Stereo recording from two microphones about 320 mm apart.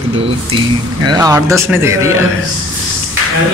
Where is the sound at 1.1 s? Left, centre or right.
Centre.